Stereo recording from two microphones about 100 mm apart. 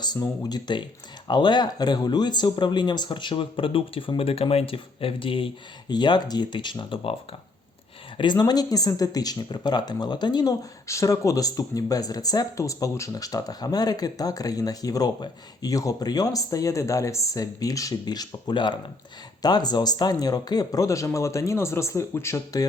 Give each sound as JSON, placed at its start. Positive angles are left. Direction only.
{"t": 0.0, "sound": "speech", "side_deg": 45}
{"t": 4.2, "sound": "speech", "side_deg": 75}
{"t": 5.9, "sound": "speech", "side_deg": 45}
{"t": 8.2, "sound": "speech", "side_deg": 45}